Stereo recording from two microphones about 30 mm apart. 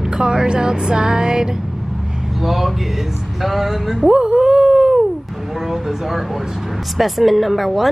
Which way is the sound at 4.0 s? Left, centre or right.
Right.